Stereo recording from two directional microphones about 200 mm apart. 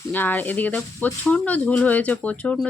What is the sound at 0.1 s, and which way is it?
Speech, 10° left (ahead or behind).